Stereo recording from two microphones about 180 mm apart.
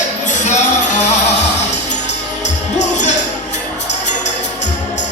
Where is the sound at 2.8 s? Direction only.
40° left (ahead or behind).